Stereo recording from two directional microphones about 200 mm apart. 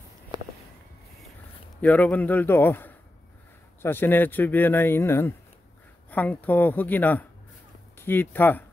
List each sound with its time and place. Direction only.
1.8 s speech: 5° left (ahead or behind)